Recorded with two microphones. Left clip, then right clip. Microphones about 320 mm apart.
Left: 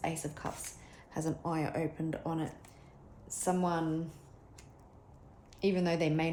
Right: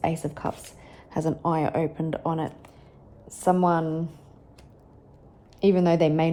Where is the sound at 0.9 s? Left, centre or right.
Right.